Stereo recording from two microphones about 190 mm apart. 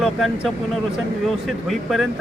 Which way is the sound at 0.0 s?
Centre (ahead or behind).